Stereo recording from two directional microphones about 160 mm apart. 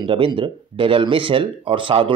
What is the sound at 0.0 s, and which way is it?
Speech, 30° right (ahead or behind).